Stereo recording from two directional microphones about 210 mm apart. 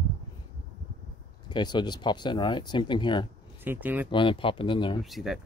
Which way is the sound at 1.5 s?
20° left (ahead or behind).